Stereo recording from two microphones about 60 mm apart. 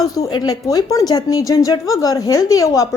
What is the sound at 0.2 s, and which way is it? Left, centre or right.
Speech, left.